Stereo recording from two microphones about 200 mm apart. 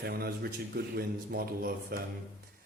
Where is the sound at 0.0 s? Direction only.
50° right (ahead or behind).